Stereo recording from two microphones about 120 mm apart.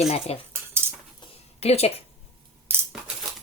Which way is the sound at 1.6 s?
60° left (ahead or behind).